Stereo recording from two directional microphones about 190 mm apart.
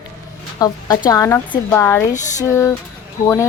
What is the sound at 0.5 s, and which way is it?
A woman's voice, 20° left (ahead or behind).